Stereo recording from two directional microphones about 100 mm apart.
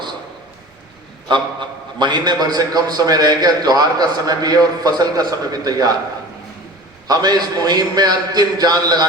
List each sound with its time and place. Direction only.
1.3 s a man's voice: 50° right (ahead or behind)
7.1 s a man's voice: 40° right (ahead or behind)